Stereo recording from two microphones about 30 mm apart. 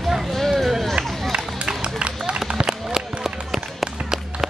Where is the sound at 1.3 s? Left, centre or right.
Right.